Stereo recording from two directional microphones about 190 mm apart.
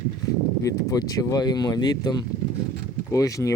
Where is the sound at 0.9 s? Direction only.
20° left (ahead or behind).